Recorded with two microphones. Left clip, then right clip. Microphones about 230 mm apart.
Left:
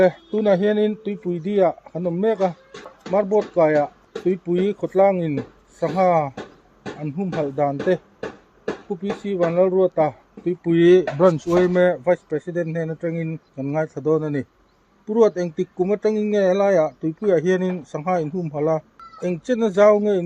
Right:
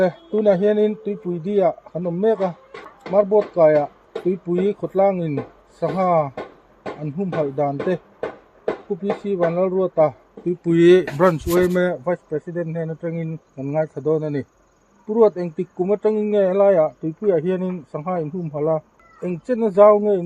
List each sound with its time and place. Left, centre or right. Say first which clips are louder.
0.0 s speech: even; right
9.3 s speech: left 2 dB; right
11.2 s speech: even; centre
11.7 s speech: left 3 dB; centre